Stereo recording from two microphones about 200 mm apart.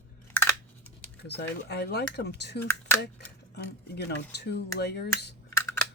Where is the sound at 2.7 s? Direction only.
10° left (ahead or behind).